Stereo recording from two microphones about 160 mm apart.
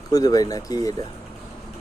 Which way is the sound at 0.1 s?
25° left (ahead or behind).